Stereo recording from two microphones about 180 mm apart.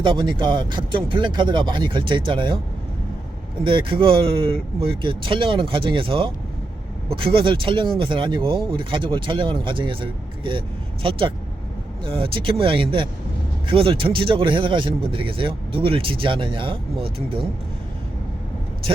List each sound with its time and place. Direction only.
0.0 s speech: 25° right (ahead or behind)
3.6 s speech: 30° right (ahead or behind)